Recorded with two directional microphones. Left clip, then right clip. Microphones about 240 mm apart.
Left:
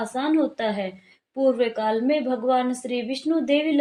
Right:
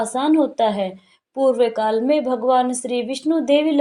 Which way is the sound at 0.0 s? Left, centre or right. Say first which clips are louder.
Right 5 dB; right.